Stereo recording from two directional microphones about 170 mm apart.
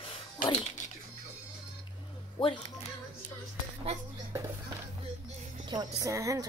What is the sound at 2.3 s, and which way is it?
Speech, 25° left (ahead or behind).